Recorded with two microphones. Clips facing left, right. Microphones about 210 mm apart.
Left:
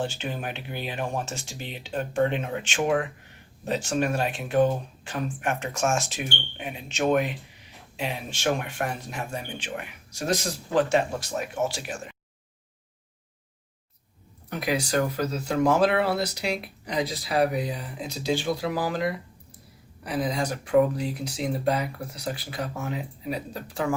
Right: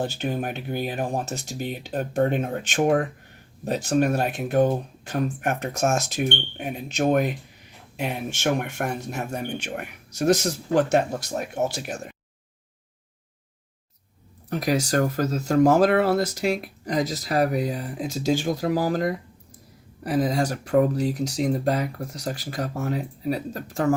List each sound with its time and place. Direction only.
0.0 s speech: 40° right (ahead or behind)
14.5 s speech: 45° right (ahead or behind)